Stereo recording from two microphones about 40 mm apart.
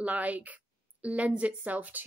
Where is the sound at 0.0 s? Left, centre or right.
Right.